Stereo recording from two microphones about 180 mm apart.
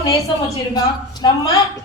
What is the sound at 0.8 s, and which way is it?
Speech, 20° left (ahead or behind).